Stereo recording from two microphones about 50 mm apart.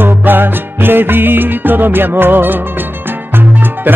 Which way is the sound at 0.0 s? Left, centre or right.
Right.